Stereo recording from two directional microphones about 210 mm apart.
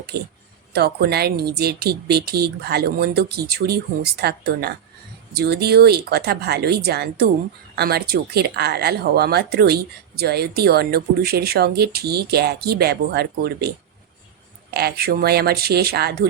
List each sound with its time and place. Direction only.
0.7 s speech: 50° right (ahead or behind)